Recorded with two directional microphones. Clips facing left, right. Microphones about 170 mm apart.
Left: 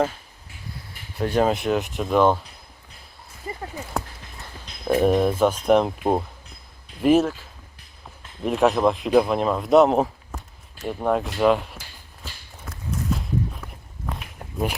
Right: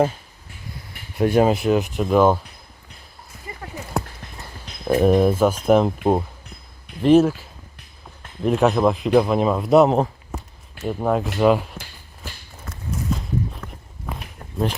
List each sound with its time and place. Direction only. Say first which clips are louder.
1.2 s speech: right 4 dB; 10° right (ahead or behind)
3.5 s a sound: left 4 dB; 35° left (ahead or behind)
4.9 s speech: right 3 dB; centre (ahead or behind)
8.4 s speech: right 2 dB; centre (ahead or behind)
12.6 s clip-clop: right 1 dB; centre (ahead or behind)